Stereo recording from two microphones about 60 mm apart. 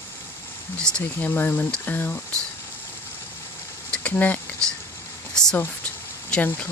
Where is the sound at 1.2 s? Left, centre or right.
Left.